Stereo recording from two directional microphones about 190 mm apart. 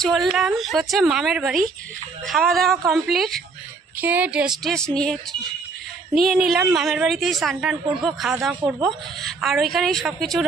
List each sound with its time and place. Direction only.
0.0 s a woman's voice: centre (ahead or behind)